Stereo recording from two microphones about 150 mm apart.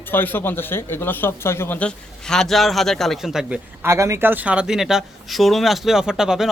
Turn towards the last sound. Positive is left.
turn(degrees=-5)  # may be behind; listen again after turning